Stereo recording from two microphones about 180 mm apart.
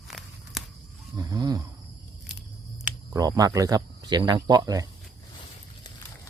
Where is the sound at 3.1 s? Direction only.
20° right (ahead or behind).